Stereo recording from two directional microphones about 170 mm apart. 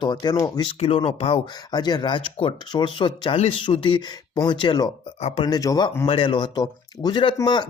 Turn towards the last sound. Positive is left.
turn(degrees=25)  # may be behind; listen again after turning